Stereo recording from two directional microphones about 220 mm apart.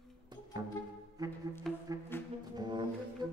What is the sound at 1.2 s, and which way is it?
Music, 15° right (ahead or behind).